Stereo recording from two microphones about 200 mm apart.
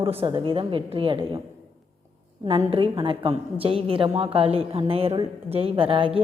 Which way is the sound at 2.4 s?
25° right (ahead or behind).